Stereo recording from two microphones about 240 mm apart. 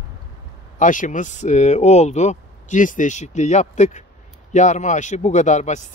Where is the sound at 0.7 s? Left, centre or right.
Left.